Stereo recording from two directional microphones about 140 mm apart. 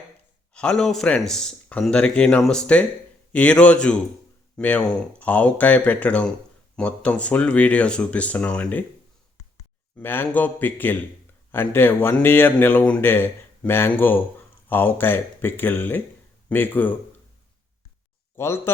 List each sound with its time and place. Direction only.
0.5 s a man's voice: 5° left (ahead or behind)
10.0 s a man's voice: 15° left (ahead or behind)
18.3 s a man's voice: 20° left (ahead or behind)